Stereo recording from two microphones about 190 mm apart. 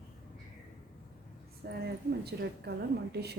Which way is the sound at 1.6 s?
60° right (ahead or behind).